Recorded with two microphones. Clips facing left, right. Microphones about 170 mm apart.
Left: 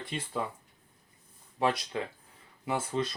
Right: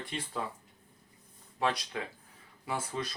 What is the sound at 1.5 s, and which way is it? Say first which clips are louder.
Speech: left 3 dB; 25° left (ahead or behind).